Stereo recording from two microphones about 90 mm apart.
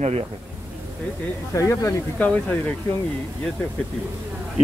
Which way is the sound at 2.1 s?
15° left (ahead or behind).